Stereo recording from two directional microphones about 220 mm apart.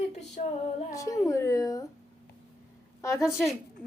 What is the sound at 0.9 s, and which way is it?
Speech, 15° left (ahead or behind).